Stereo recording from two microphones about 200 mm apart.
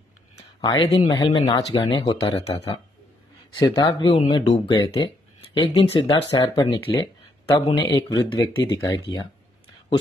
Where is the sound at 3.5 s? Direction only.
20° left (ahead or behind).